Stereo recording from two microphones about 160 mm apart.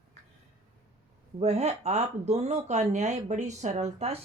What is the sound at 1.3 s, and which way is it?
Speech, 40° right (ahead or behind).